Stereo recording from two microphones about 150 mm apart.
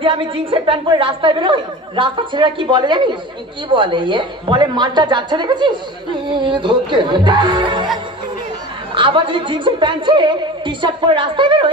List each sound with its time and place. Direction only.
0.0 s a woman's voice: 35° right (ahead or behind)
8.9 s a woman's voice: 35° right (ahead or behind)